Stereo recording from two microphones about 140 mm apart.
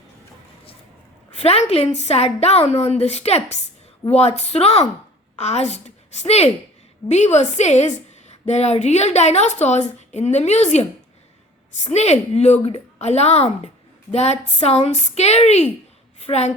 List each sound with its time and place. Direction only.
1.3 s a woman's voice: 45° left (ahead or behind)